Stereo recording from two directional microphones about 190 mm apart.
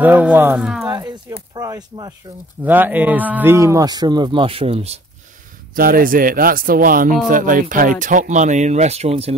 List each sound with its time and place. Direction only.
0.0 s speech: 10° right (ahead or behind)
0.8 s a sound: 20° right (ahead or behind)
1.3 s a man's voice: 20° right (ahead or behind)
2.6 s a man's voice: 10° right (ahead or behind); by 5.0 s 30° right (ahead or behind)
5.8 s speech: 50° right (ahead or behind); by 9.3 s 35° right (ahead or behind)